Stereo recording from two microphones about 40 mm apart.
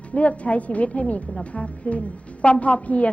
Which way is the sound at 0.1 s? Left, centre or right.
Left.